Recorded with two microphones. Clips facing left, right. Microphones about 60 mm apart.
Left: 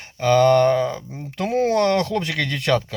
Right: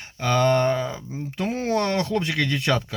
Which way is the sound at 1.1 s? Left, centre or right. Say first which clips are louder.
Left 3 dB; left.